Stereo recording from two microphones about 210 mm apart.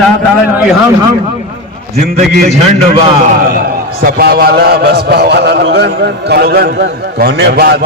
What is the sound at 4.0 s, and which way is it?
A man's voice, 45° right (ahead or behind).